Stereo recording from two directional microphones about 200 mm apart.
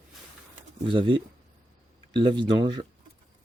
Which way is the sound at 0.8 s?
25° right (ahead or behind).